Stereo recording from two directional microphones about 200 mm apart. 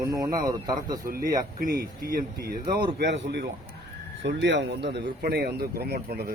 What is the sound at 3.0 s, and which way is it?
A man's voice, 60° right (ahead or behind).